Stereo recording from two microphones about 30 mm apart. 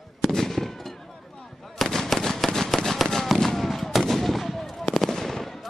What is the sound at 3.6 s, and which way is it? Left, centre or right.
Fireworks, centre.